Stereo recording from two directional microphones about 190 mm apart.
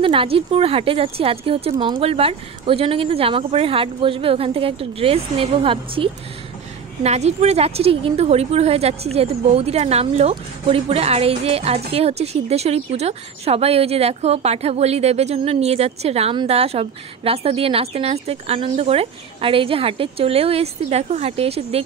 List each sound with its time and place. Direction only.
0.0 s a woman's voice: 30° right (ahead or behind)